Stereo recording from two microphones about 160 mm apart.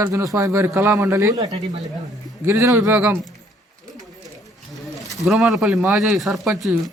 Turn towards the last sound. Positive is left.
turn(degrees=0)  # may be behind; listen again after turning